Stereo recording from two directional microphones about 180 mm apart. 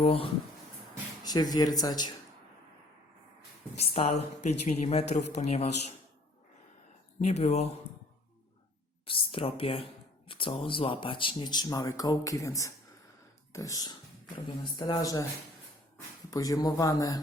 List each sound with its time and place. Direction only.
0.0 s a woman's voice: 35° left (ahead or behind)
1.2 s speech: 20° left (ahead or behind)
3.8 s a woman's voice: 35° left (ahead or behind)
7.3 s a woman's voice: 35° left (ahead or behind)
9.0 s a woman's voice: 30° left (ahead or behind)
16.3 s speech: 20° left (ahead or behind)